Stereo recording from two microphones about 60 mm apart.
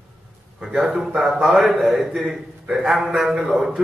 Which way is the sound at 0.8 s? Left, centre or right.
Centre.